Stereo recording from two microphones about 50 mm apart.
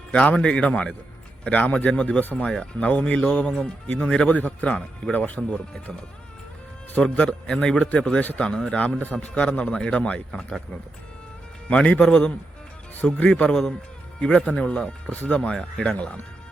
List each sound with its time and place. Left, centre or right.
0.1 s a man's voice: left
2.2 s speech: left
2.5 s a man's voice: centre
5.1 s speech: left
5.4 s a man's voice: centre
11.7 s a man's voice: left
15.1 s a man's voice: left
15.4 s a man's voice: centre